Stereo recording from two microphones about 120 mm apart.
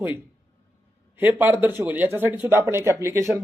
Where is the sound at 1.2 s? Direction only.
15° right (ahead or behind).